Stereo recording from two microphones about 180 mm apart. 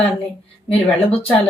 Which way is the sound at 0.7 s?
30° left (ahead or behind).